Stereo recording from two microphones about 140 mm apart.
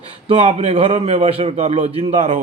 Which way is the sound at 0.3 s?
40° right (ahead or behind).